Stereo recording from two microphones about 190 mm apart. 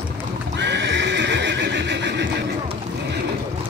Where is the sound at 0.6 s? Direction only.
65° right (ahead or behind).